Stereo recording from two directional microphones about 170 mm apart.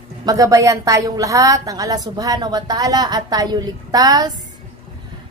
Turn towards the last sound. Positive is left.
turn(degrees=-25)  # may be behind; listen again after turning